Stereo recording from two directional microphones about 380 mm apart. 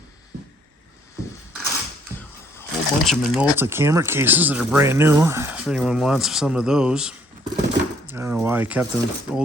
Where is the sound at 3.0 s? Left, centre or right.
Centre.